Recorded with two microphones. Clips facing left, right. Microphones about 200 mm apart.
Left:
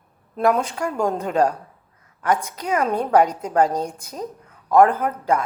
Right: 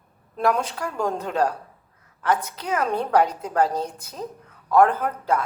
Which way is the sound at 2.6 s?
10° left (ahead or behind).